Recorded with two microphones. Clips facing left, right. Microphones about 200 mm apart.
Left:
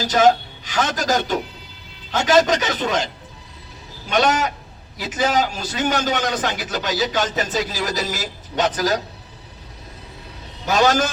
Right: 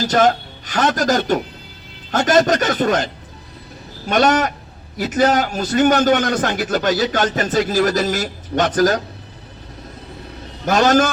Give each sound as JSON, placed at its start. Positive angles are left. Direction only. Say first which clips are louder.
{"t": 0.1, "sound": "a man's voice", "louder": "left 2 dB", "side_deg": -50}
{"t": 4.1, "sound": "a man's voice", "louder": "right 3 dB", "side_deg": -55}
{"t": 10.7, "sound": "a man's voice", "louder": "right 3 dB", "side_deg": -50}